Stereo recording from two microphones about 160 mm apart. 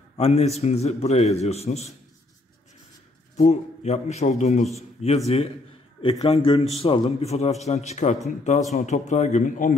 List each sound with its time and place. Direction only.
0.2 s a man's voice: 40° left (ahead or behind)
3.3 s a man's voice: 45° left (ahead or behind)